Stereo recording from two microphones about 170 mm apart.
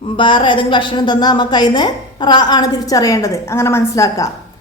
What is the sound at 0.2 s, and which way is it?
A woman's voice, 30° left (ahead or behind).